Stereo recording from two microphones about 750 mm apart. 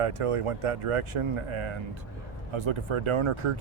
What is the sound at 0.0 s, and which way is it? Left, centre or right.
Speech, right.